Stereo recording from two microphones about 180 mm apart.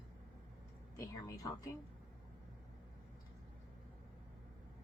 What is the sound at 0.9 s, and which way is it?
Speech, 20° left (ahead or behind).